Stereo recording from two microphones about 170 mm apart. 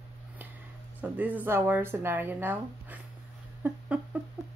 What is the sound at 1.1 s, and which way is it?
Speech, 10° right (ahead or behind).